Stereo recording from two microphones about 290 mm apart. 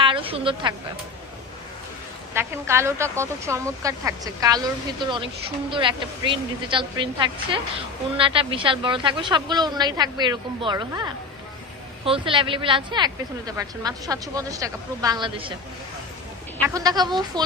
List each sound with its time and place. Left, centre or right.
0.0 s a sound: centre
2.3 s a woman's voice: centre
16.6 s a woman's voice: centre